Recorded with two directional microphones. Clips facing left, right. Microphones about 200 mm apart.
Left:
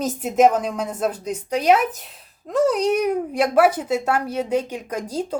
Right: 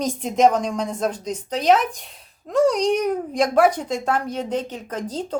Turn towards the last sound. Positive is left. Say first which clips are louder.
# left 1 dB
turn(degrees=10)  # may be behind; listen again after turning